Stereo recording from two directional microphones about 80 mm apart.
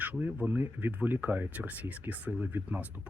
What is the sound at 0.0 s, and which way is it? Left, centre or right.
Speech, right.